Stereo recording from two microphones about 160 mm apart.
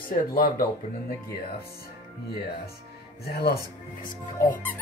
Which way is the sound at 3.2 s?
75° left (ahead or behind).